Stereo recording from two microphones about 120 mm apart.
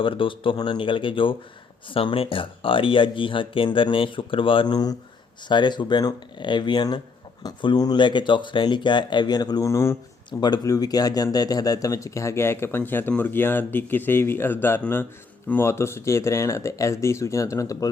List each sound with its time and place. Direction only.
0.0 s speech: 45° left (ahead or behind); by 17.8 s 30° left (ahead or behind)